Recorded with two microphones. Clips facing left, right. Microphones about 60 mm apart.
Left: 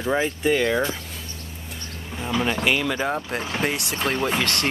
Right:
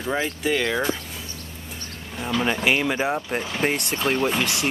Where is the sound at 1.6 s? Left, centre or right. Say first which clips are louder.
Left 2 dB; centre.